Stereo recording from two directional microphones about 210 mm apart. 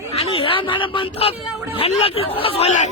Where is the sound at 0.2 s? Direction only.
25° left (ahead or behind).